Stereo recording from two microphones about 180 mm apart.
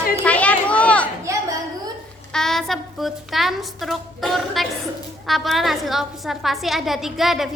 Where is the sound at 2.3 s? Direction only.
Centre (ahead or behind).